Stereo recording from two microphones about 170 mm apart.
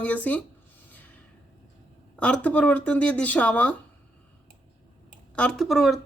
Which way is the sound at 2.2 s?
5° left (ahead or behind).